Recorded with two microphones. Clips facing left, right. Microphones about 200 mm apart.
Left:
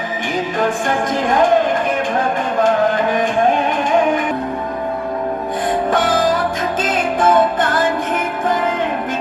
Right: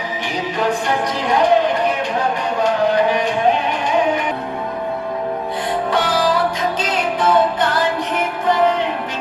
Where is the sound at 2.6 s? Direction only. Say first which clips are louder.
Left 1 dB; 50° left (ahead or behind).